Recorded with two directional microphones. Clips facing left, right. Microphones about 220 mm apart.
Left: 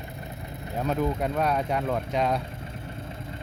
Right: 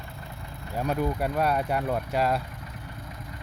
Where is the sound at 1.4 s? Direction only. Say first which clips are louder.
Right 2 dB; 5° right (ahead or behind).